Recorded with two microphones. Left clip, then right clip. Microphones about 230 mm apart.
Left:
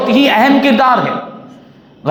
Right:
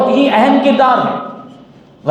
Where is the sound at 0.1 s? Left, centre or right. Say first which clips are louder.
Left 1 dB; left.